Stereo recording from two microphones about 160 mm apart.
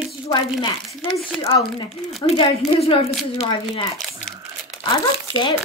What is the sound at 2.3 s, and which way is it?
Speech, 40° left (ahead or behind).